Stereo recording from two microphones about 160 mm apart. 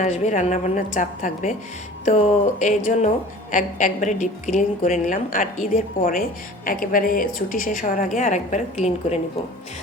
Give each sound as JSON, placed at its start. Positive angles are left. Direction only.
{"t": 0.0, "sound": "a woman's voice", "side_deg": 45}